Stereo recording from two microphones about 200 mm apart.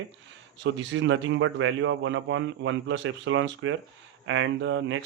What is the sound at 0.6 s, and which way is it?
Speech, 65° right (ahead or behind).